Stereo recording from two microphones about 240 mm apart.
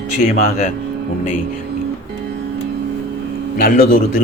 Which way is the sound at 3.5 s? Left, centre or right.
Left.